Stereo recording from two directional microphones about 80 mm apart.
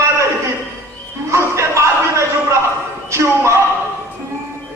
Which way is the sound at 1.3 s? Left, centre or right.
Right.